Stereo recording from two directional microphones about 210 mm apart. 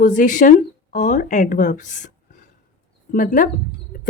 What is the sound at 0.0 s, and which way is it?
Speech, 40° left (ahead or behind).